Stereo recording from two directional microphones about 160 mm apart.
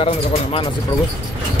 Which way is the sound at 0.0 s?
35° left (ahead or behind).